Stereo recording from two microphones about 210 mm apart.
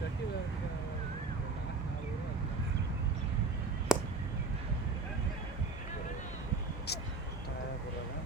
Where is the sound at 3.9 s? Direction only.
5° right (ahead or behind).